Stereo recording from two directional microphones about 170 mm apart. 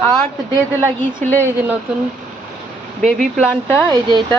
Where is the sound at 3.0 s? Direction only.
5° left (ahead or behind).